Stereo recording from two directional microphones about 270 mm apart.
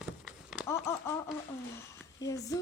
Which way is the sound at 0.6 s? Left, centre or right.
Centre.